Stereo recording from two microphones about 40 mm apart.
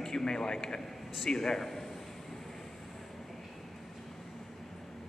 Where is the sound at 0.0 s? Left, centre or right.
Centre.